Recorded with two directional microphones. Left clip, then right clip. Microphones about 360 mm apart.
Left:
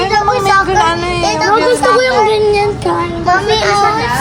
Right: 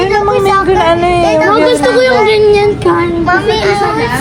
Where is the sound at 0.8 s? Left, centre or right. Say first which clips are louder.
Right 3 dB; centre.